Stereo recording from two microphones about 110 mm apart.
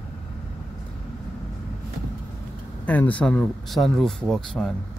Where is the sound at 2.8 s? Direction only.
15° left (ahead or behind).